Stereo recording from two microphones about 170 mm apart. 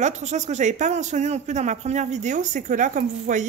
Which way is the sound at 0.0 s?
45° right (ahead or behind).